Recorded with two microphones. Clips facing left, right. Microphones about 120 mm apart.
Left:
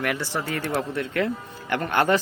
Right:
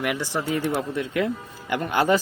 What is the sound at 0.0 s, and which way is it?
Speech, 15° right (ahead or behind).